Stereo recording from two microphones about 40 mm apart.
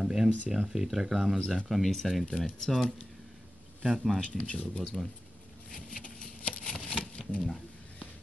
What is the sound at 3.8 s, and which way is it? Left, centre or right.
Speech, centre.